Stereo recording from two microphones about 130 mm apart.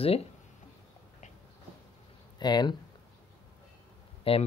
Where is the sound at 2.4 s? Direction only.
35° left (ahead or behind).